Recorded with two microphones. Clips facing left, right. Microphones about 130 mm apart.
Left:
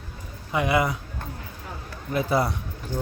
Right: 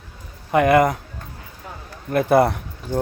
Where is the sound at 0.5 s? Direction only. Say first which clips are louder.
Right 8 dB; 55° right (ahead or behind).